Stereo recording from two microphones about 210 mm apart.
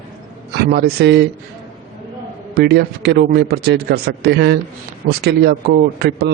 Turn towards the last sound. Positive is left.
turn(degrees=-50)  # may be behind; listen again after turning